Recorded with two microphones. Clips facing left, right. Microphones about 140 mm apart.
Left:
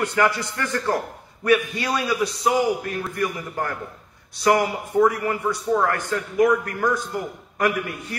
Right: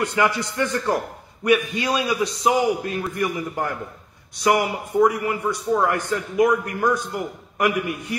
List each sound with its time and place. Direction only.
0.0 s a man's voice: 15° right (ahead or behind)